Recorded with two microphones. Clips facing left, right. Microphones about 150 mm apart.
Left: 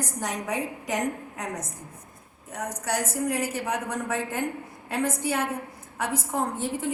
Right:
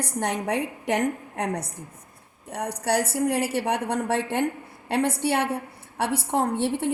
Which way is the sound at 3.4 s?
70° right (ahead or behind).